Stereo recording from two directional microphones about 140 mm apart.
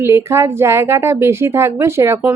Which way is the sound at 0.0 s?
20° right (ahead or behind).